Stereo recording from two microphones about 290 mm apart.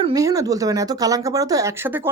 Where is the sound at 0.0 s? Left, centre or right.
Centre.